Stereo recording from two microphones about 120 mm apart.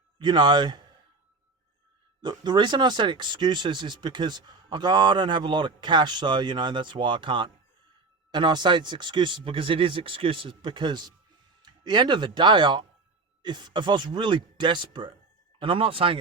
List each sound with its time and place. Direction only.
0.2 s speech: 40° right (ahead or behind)
2.2 s speech: 40° right (ahead or behind)